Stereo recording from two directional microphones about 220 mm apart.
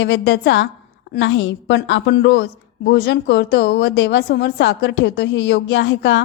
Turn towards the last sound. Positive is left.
turn(degrees=55)  # may be behind; listen again after turning